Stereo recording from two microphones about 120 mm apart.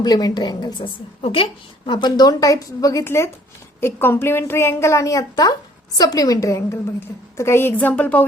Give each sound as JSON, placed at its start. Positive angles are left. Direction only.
{"t": 0.0, "sound": "a woman's voice", "side_deg": 30}
{"t": 1.2, "sound": "a woman's voice", "side_deg": 50}
{"t": 1.9, "sound": "a woman's voice", "side_deg": 40}